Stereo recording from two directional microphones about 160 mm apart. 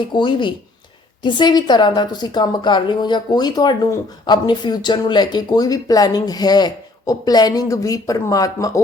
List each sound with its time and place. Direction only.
0.1 s a woman's voice: 30° left (ahead or behind)